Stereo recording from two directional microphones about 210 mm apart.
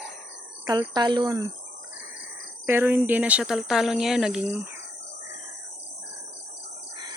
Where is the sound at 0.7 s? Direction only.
20° right (ahead or behind).